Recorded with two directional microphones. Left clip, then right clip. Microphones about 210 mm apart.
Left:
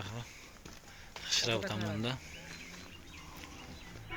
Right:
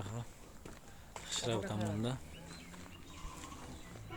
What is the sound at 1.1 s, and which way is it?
Speech, 10° right (ahead or behind).